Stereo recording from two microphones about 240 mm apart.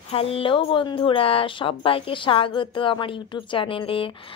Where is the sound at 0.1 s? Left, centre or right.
Left.